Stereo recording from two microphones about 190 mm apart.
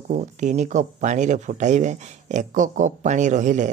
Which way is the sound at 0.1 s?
40° right (ahead or behind).